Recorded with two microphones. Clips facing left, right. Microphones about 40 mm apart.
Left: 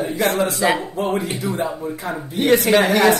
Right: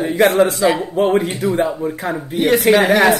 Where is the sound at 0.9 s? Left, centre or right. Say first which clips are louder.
Right 6 dB; right.